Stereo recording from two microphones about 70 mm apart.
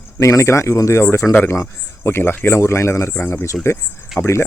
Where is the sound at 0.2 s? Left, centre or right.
Left.